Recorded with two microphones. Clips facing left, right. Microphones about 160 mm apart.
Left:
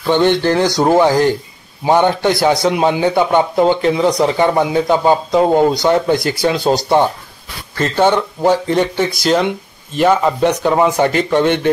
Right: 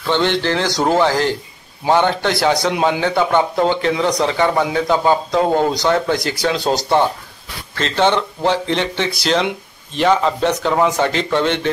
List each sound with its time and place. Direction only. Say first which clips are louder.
0.0 s speech: left 5 dB; 15° left (ahead or behind)
6.4 s speech: left 2 dB; 5° left (ahead or behind)